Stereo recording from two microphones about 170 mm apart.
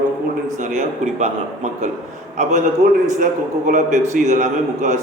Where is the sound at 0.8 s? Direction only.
40° right (ahead or behind).